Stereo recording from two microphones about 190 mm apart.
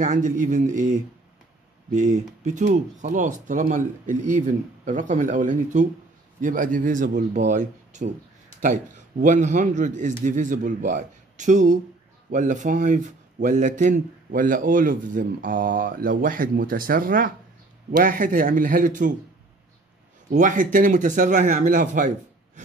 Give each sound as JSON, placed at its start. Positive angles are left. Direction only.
{"t": 0.0, "sound": "a man's voice", "side_deg": -40}
{"t": 20.2, "sound": "a man's voice", "side_deg": -45}